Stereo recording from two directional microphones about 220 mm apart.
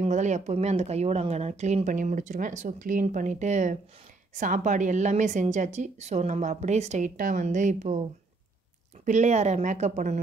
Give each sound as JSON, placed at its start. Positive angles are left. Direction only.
{"t": 0.0, "sound": "speech", "side_deg": -30}
{"t": 9.0, "sound": "speech", "side_deg": -30}